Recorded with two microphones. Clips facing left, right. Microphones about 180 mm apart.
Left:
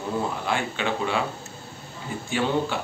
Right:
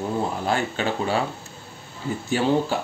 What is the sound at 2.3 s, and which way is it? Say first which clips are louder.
Speech: right 3 dB; 40° right (ahead or behind).